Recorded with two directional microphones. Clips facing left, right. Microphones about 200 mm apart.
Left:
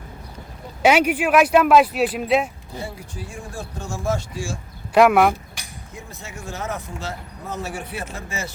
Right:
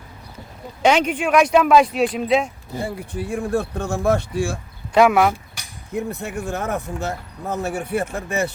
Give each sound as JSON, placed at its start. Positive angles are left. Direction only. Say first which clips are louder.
{"t": 0.8, "sound": "speech", "louder": "left 1 dB", "side_deg": 5}
{"t": 2.8, "sound": "speech", "louder": "right 8 dB", "side_deg": -60}
{"t": 4.9, "sound": "speech", "louder": "even", "side_deg": 0}
{"t": 5.9, "sound": "speech", "louder": "right 14 dB", "side_deg": -60}